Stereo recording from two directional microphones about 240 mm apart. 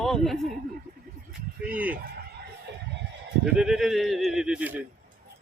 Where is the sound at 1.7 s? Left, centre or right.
Centre.